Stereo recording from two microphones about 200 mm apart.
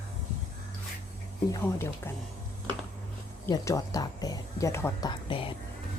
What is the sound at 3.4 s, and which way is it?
Speech, 20° left (ahead or behind).